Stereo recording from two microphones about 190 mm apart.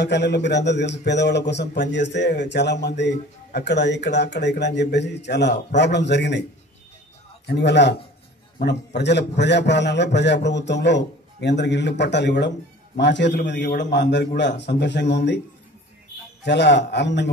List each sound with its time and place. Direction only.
0.0 s a man's voice: 65° left (ahead or behind)
7.4 s a man's voice: 65° left (ahead or behind)
16.4 s a man's voice: 65° left (ahead or behind)